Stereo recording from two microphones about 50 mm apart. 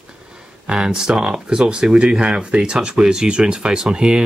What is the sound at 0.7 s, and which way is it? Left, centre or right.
Speech, centre.